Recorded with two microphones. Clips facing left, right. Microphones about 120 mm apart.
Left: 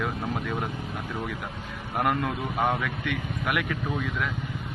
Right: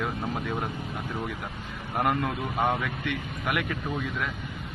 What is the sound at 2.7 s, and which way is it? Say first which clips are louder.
Speech: even; 15° right (ahead or behind).